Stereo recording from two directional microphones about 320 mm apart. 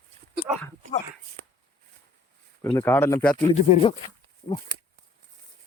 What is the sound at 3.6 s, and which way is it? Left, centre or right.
Speech, centre.